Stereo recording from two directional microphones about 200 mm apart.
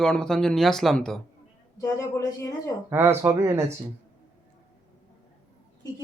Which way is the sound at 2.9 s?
10° right (ahead or behind).